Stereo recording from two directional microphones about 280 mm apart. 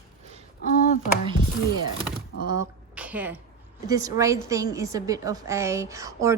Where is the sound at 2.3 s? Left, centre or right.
Left.